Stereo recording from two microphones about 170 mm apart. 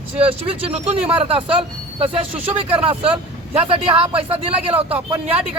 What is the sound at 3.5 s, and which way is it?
Speech, 35° right (ahead or behind).